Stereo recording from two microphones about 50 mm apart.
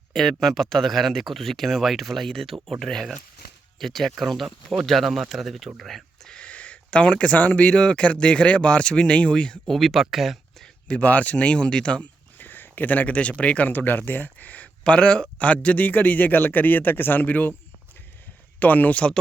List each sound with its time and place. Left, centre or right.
0.1 s speech: centre
6.2 s speech: left
9.6 s speech: centre
10.8 s speech: left
12.4 s speech: left
13.7 s speech: left
18.6 s speech: left